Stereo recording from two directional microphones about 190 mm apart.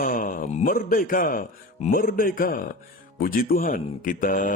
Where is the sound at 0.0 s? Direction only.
45° left (ahead or behind).